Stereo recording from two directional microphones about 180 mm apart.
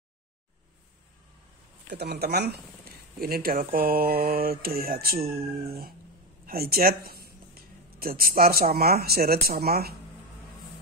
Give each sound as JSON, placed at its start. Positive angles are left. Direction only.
{"t": 1.9, "sound": "speech", "side_deg": -65}